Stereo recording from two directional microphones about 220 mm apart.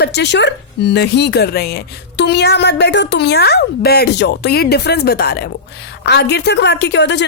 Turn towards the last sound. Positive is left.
turn(degrees=55)  # may be behind; listen again after turning